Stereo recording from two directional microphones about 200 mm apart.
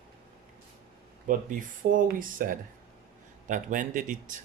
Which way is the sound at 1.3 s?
40° right (ahead or behind).